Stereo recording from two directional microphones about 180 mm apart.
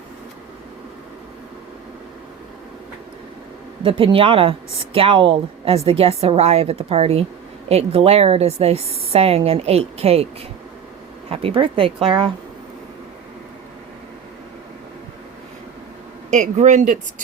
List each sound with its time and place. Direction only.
3.8 s speech: 30° right (ahead or behind)
11.3 s speech: 30° right (ahead or behind)
16.3 s speech: 40° right (ahead or behind)